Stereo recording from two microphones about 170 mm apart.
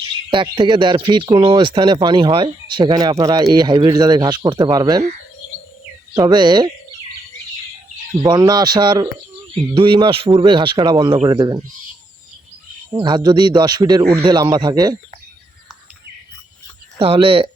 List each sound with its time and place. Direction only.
0.3 s speech: 30° right (ahead or behind)
6.1 s speech: 25° right (ahead or behind)
8.2 s speech: 25° right (ahead or behind)
12.9 s speech: 25° right (ahead or behind)
17.0 s speech: 35° right (ahead or behind)